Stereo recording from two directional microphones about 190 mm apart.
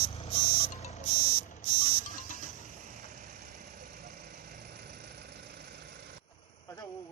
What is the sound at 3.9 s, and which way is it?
Vehicle, 55° right (ahead or behind).